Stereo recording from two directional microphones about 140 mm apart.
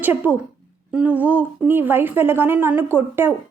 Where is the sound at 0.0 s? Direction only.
15° right (ahead or behind).